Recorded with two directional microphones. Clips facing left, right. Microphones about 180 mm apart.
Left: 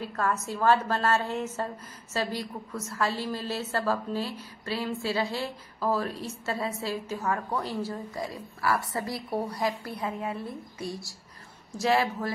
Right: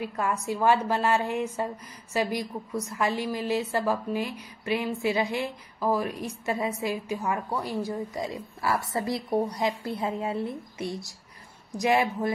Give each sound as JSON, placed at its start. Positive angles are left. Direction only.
{"t": 0.0, "sound": "a woman's voice", "side_deg": -10}